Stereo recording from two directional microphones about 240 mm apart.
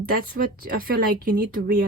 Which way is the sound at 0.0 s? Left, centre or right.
Right.